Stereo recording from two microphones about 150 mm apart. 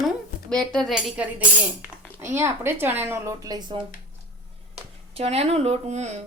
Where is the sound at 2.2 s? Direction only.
15° right (ahead or behind).